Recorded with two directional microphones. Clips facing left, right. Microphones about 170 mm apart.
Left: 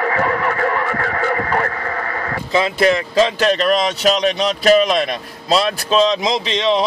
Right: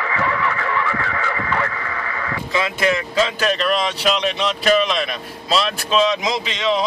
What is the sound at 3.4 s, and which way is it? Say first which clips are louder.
Speech: left 4 dB; 40° left (ahead or behind).